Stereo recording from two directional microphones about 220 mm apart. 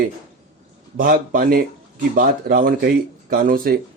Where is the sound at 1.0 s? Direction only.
40° right (ahead or behind).